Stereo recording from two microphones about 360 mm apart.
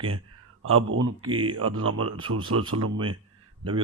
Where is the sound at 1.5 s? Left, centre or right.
Right.